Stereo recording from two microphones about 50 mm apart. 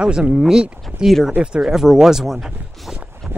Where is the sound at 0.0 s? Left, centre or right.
Centre.